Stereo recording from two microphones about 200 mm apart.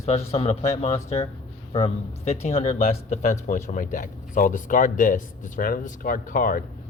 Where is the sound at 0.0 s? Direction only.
30° left (ahead or behind).